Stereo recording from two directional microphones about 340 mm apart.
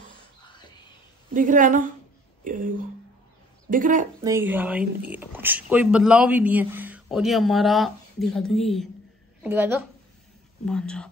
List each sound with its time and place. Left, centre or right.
1.3 s a woman's voice: right
3.7 s a woman's voice: right
4.2 s a man's voice: centre